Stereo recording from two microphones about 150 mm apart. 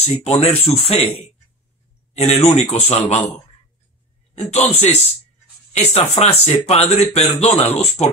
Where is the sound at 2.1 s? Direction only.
45° left (ahead or behind).